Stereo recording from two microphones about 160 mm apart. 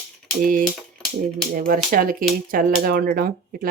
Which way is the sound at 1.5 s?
65° right (ahead or behind).